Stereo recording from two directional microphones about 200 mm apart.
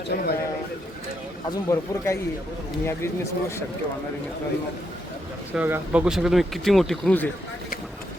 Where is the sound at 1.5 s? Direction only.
15° left (ahead or behind).